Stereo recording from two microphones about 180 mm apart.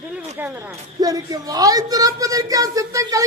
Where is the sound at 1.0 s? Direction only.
20° right (ahead or behind).